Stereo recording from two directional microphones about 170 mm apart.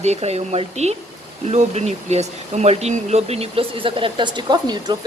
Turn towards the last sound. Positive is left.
turn(degrees=-25)  # may be behind; listen again after turning